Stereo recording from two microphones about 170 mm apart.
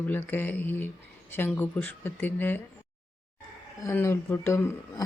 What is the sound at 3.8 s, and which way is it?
Speech, 15° left (ahead or behind).